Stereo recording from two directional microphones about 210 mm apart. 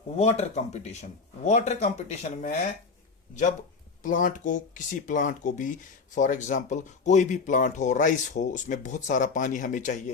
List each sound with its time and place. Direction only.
0.2 s speech: 30° left (ahead or behind)
4.0 s speech: 40° left (ahead or behind)